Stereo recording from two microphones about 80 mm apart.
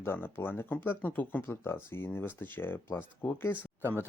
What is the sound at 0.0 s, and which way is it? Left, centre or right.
Speech, left.